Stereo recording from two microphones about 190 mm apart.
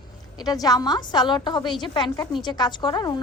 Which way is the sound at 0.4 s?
20° left (ahead or behind).